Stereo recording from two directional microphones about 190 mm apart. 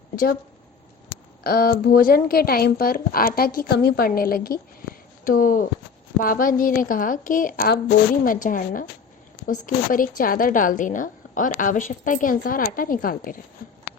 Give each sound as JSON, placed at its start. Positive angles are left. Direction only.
{"t": 1.5, "sound": "a woman's voice", "side_deg": 55}